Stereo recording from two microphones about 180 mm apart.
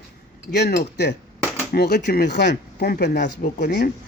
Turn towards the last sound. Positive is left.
turn(degrees=70)  # may be behind; listen again after turning